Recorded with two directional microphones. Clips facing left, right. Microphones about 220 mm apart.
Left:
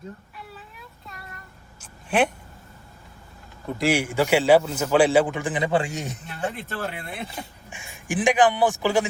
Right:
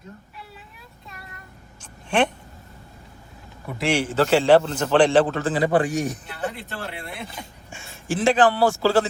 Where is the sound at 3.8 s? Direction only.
10° left (ahead or behind); by 6.2 s 25° left (ahead or behind).